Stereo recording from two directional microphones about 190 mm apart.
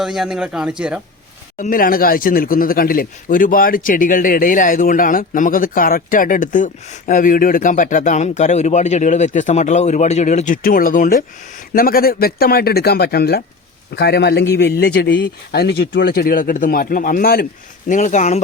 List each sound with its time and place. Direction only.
0.0 s a man's voice: centre (ahead or behind)
1.5 s speech: 45° left (ahead or behind)